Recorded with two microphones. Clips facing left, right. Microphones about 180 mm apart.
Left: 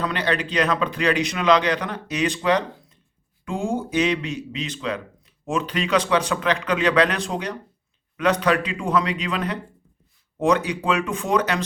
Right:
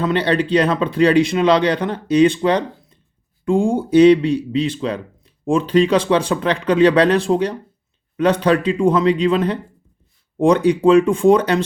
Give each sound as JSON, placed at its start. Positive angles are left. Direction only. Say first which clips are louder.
{"t": 0.0, "sound": "speech", "louder": "right 7 dB", "side_deg": -30}